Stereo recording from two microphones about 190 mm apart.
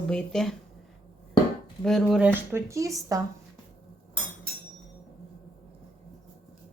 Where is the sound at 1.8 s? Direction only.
Centre (ahead or behind); by 3.2 s 15° right (ahead or behind).